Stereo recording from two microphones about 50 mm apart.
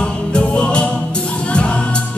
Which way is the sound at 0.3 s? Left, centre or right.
Left.